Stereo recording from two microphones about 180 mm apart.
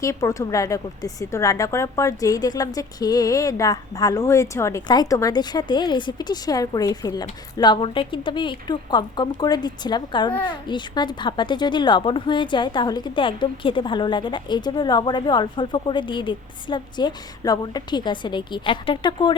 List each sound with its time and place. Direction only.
0.0 s a woman's voice: 15° left (ahead or behind)